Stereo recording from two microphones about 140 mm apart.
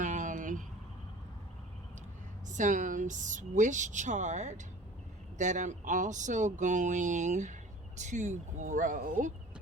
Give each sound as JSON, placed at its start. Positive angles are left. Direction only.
{"t": 0.0, "sound": "vehicle", "side_deg": -65}
{"t": 2.5, "sound": "speech", "side_deg": -65}